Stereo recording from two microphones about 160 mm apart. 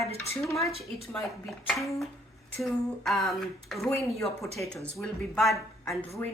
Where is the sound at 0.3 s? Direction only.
Centre (ahead or behind).